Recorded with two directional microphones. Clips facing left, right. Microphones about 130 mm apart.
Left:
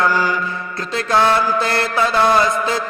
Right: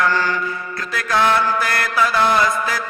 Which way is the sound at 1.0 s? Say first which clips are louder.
Left 2 dB; 25° left (ahead or behind).